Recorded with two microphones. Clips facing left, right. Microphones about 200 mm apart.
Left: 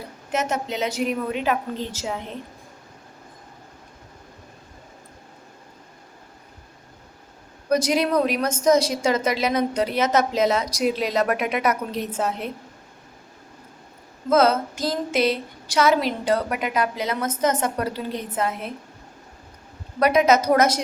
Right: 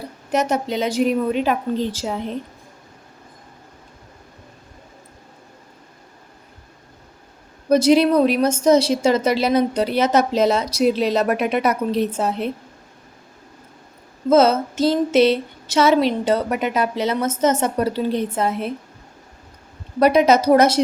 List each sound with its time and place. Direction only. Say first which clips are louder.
0.3 s a woman's voice: right 5 dB; 35° right (ahead or behind)
7.7 s a woman's voice: right 6 dB; 30° right (ahead or behind)
14.3 s a woman's voice: right 4 dB; 25° right (ahead or behind)
20.0 s a woman's voice: right 3 dB; 30° right (ahead or behind)